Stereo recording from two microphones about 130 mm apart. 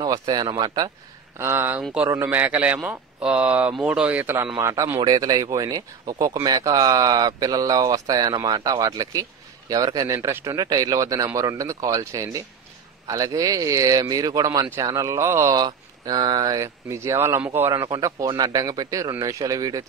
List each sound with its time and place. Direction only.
0.0 s speech: 30° right (ahead or behind)
1.4 s speech: 20° right (ahead or behind)